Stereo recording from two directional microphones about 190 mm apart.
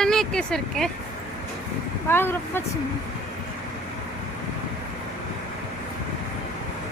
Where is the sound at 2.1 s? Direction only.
10° left (ahead or behind).